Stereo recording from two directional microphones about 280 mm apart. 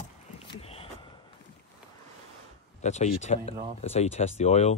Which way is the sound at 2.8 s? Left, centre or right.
Left.